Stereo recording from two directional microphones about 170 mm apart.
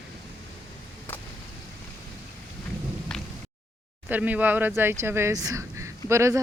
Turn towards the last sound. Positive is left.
turn(degrees=-15)  # may be behind; listen again after turning